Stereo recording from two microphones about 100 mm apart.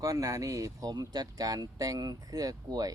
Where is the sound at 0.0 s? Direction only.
35° right (ahead or behind).